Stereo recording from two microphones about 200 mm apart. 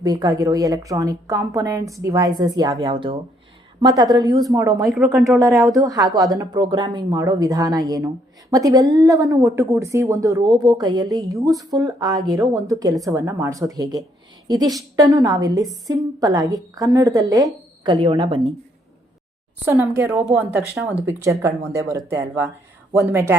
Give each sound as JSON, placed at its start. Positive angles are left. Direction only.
{"t": 0.0, "sound": "a woman's voice", "side_deg": -20}
{"t": 4.9, "sound": "a woman's voice", "side_deg": -5}
{"t": 19.6, "sound": "speech", "side_deg": -10}